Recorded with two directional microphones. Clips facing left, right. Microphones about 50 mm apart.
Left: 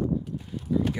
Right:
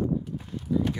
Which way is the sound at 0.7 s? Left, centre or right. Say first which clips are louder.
Even; centre.